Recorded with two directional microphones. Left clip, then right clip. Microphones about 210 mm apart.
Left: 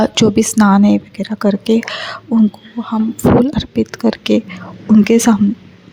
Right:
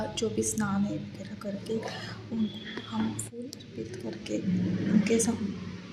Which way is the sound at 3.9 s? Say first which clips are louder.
Left 17 dB; 50° left (ahead or behind).